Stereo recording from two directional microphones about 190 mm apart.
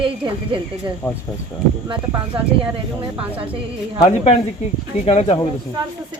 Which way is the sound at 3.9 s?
35° left (ahead or behind).